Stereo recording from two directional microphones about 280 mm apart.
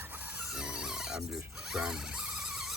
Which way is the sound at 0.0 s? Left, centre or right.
Centre.